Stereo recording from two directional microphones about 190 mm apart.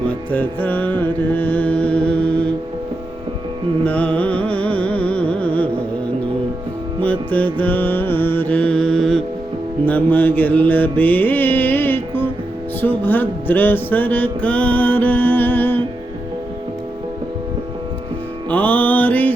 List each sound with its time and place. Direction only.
0.3 s music: 10° left (ahead or behind)
3.8 s music: 5° left (ahead or behind)
7.0 s mantra: 10° left (ahead or behind)
18.4 s music: 10° left (ahead or behind)